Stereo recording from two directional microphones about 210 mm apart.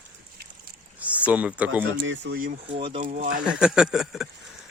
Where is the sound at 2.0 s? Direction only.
60° right (ahead or behind).